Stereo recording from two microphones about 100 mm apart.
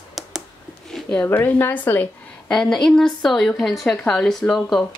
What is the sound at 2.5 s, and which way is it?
A woman's voice, 5° left (ahead or behind).